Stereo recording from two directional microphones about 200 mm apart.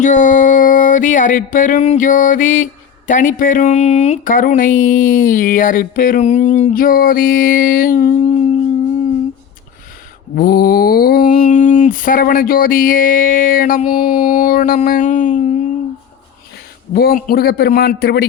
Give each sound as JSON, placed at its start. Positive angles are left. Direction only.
{"t": 0.0, "sound": "a sound", "side_deg": 40}
{"t": 10.3, "sound": "mantra", "side_deg": 50}
{"t": 16.9, "sound": "mantra", "side_deg": 50}